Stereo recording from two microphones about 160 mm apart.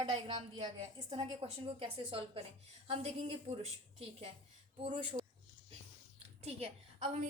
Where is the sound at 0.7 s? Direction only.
40° right (ahead or behind).